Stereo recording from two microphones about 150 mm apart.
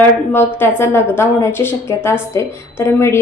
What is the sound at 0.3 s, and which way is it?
A woman's voice, 15° left (ahead or behind).